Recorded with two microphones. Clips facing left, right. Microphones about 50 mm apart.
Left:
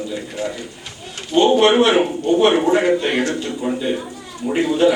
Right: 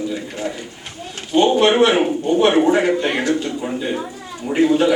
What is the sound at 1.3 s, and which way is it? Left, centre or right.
Speech, centre.